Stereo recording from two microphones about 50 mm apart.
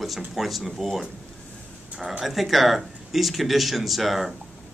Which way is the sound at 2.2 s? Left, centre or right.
Centre.